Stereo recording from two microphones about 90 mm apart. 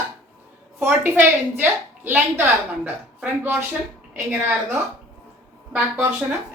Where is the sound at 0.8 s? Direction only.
20° right (ahead or behind).